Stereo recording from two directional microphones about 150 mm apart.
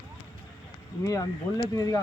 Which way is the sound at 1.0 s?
20° left (ahead or behind).